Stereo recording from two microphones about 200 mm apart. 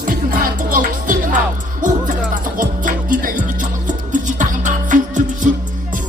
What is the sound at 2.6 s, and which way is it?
Music, 45° right (ahead or behind).